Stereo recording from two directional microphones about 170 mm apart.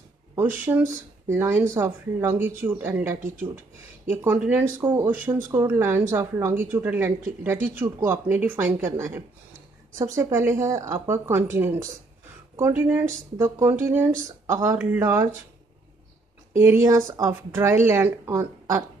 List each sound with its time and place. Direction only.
0.7 s speech: 15° right (ahead or behind)
16.5 s speech: 15° right (ahead or behind)